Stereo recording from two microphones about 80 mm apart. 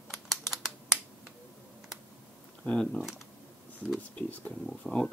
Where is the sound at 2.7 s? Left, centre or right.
Centre.